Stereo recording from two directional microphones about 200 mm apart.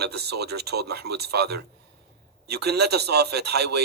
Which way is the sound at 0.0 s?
55° right (ahead or behind).